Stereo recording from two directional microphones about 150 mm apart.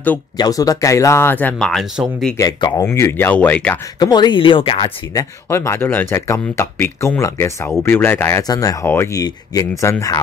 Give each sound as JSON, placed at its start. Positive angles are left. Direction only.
{"t": 0.4, "sound": "speech", "side_deg": 25}
{"t": 2.3, "sound": "speech", "side_deg": 20}
{"t": 4.0, "sound": "speech", "side_deg": 30}
{"t": 5.1, "sound": "speech", "side_deg": 20}